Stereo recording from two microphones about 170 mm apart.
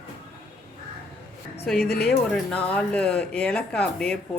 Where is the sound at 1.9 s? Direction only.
65° left (ahead or behind).